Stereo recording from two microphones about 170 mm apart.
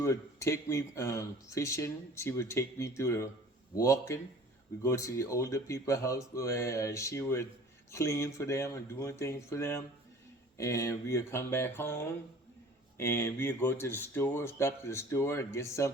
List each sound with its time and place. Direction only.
0.0 s speech: 15° left (ahead or behind)